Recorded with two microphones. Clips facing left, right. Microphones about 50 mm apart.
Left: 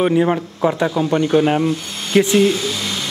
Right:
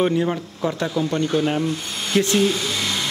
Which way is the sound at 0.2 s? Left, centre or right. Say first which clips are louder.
Left 6 dB; left.